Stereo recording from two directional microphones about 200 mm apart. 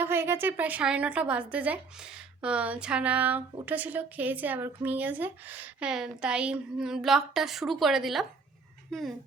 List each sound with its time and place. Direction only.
0.0 s a woman's voice: 10° right (ahead or behind)
8.9 s fowl: centre (ahead or behind)